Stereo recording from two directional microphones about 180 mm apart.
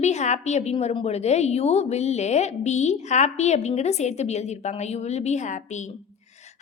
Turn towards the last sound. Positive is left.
turn(degrees=40)  # may be behind; listen again after turning